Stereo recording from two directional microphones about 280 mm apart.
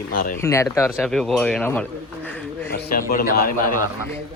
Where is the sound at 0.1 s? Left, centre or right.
Left.